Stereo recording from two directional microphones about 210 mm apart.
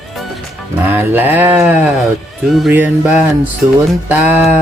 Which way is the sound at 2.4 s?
Centre (ahead or behind).